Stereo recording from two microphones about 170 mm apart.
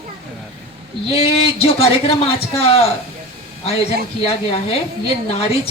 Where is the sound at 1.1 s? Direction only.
35° left (ahead or behind).